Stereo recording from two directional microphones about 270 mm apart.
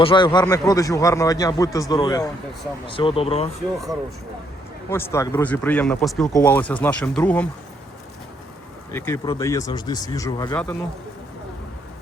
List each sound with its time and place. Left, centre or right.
0.0 s speech: centre
4.9 s speech: centre
8.9 s speech: centre